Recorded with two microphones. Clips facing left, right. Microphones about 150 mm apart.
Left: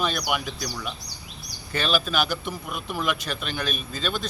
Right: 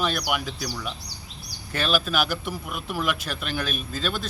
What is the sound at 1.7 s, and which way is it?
Speech, 5° right (ahead or behind).